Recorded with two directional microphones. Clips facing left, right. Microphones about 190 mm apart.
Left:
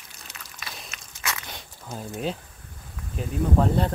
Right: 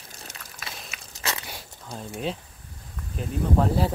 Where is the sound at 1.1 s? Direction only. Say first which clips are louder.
Right 1 dB; 35° right (ahead or behind).